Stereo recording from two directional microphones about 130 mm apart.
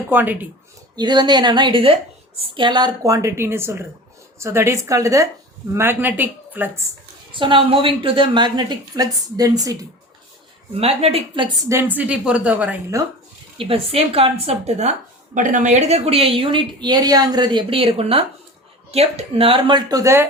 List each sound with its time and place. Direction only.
0.1 s speech: 15° right (ahead or behind)
0.9 s a woman's voice: 35° right (ahead or behind); by 6.8 s 15° right (ahead or behind)
7.3 s a woman's voice: 40° right (ahead or behind)
10.8 s a woman's voice: 50° right (ahead or behind)
11.7 s speech: 15° right (ahead or behind)
12.9 s a woman's voice: 25° right (ahead or behind)
13.6 s a woman's voice: 50° right (ahead or behind)
15.4 s a woman's voice: 75° right (ahead or behind); by 20.2 s 25° right (ahead or behind)